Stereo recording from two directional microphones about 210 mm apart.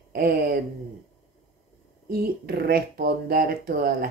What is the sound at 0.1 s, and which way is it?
Speech, 45° right (ahead or behind).